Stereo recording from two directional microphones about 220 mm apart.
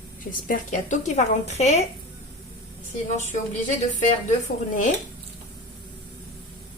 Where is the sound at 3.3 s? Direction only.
35° left (ahead or behind).